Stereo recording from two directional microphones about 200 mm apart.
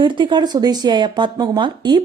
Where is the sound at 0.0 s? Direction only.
25° right (ahead or behind).